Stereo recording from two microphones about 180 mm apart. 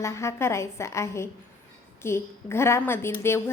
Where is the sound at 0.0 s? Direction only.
15° left (ahead or behind).